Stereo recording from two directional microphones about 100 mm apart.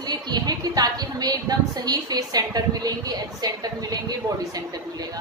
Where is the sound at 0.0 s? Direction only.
40° right (ahead or behind).